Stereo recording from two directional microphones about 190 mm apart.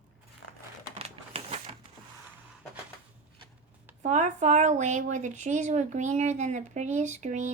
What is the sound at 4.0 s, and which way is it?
A woman's voice, 40° right (ahead or behind).